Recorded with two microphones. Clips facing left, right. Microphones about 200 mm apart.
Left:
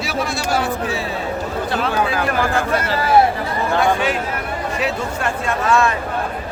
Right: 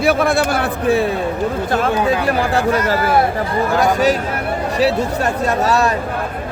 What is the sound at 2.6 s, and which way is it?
Speech, 40° right (ahead or behind).